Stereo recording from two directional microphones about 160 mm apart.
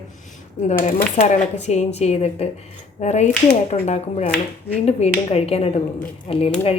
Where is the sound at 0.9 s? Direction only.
45° left (ahead or behind).